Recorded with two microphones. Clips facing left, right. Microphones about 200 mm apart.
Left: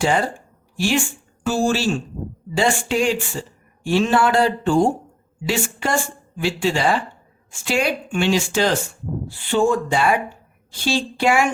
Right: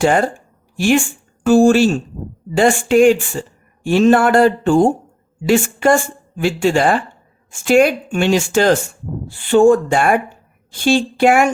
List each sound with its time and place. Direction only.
0.0 s speech: 50° right (ahead or behind)